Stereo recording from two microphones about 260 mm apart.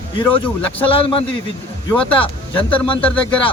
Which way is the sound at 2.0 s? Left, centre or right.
Centre.